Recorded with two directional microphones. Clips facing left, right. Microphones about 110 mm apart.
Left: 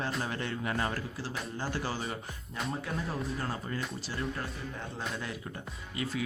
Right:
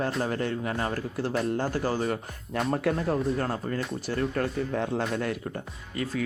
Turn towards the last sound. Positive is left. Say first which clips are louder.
# right 4 dB
turn(degrees=-50)  # may be behind; listen again after turning